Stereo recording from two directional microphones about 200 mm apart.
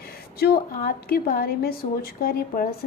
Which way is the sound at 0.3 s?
50° left (ahead or behind).